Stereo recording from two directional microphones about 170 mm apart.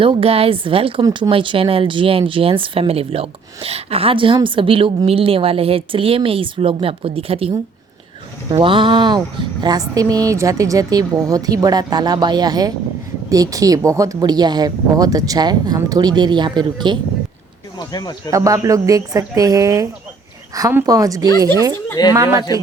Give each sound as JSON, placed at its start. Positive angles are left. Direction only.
{"t": 0.0, "sound": "speech", "side_deg": -35}
{"t": 17.7, "sound": "speech", "side_deg": 25}
{"t": 18.3, "sound": "speech", "side_deg": -20}